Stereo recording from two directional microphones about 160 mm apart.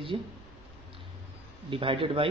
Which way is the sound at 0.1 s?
30° right (ahead or behind).